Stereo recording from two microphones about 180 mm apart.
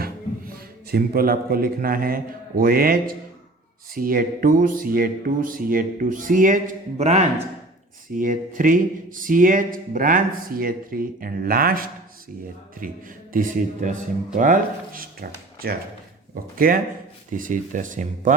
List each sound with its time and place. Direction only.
0.0 s a man's voice: 60° right (ahead or behind)
14.3 s speech: 45° right (ahead or behind)
16.3 s speech: 50° right (ahead or behind)